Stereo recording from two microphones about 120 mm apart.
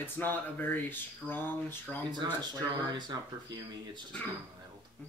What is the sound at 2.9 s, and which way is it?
Speech, 35° right (ahead or behind).